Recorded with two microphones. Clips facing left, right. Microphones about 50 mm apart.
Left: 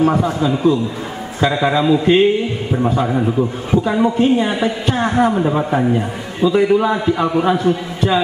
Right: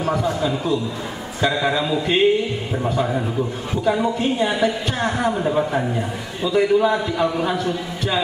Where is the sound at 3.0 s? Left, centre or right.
Centre.